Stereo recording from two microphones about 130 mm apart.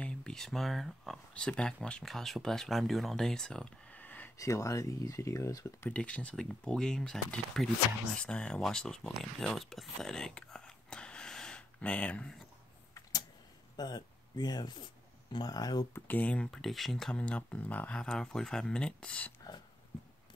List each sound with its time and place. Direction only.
0.0 s speech: 5° left (ahead or behind)
4.4 s speech: 25° left (ahead or behind)
5.9 s speech: 10° left (ahead or behind)
13.7 s speech: 30° left (ahead or behind)
15.9 s speech: 10° left (ahead or behind)